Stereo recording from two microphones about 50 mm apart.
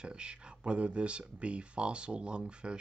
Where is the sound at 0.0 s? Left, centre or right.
Centre.